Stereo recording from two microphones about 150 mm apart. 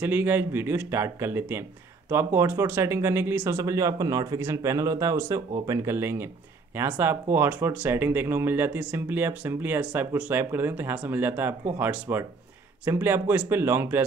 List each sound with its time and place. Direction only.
0.0 s speech: 15° right (ahead or behind)